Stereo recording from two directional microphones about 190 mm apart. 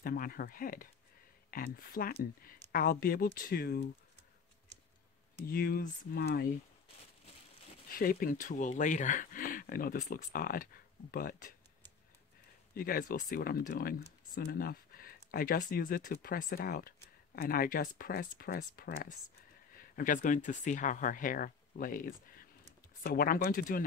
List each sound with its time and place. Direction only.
0.0 s speech: 50° left (ahead or behind)
5.4 s speech: 50° left (ahead or behind)
7.9 s speech: 50° left (ahead or behind)
12.7 s speech: 50° left (ahead or behind)